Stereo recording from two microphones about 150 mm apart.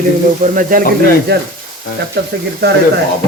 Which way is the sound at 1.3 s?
90° right.